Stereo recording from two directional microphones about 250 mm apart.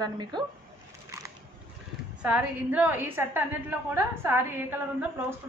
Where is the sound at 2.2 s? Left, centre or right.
Centre.